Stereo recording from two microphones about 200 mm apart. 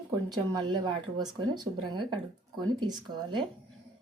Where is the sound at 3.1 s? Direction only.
20° right (ahead or behind).